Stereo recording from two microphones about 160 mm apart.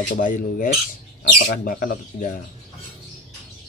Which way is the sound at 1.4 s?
75° left (ahead or behind).